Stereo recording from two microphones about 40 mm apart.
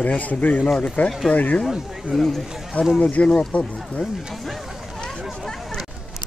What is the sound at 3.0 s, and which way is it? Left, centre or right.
Speech, left.